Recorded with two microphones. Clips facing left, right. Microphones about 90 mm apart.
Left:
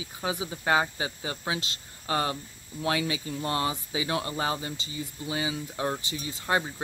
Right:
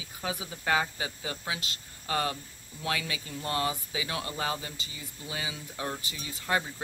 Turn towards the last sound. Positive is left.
turn(degrees=25)  # may be behind; listen again after turning